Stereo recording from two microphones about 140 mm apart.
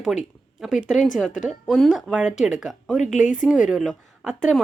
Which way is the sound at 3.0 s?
60° left (ahead or behind).